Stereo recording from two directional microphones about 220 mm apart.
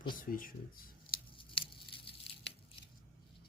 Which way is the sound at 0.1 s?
40° left (ahead or behind).